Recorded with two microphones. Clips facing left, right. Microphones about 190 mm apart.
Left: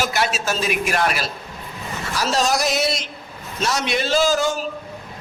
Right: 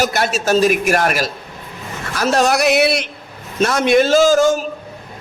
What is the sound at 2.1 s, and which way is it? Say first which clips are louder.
Speech: right 5 dB; 55° right (ahead or behind).